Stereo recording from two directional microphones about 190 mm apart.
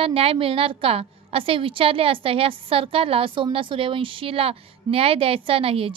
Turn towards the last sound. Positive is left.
turn(degrees=-30)  # may be behind; listen again after turning